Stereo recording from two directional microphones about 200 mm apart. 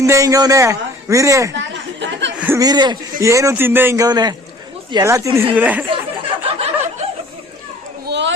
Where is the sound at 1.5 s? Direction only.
65° right (ahead or behind).